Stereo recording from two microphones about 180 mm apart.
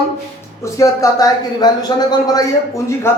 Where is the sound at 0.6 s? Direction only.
15° left (ahead or behind).